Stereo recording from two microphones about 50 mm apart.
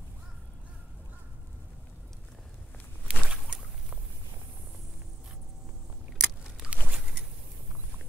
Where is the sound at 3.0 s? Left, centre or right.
Right.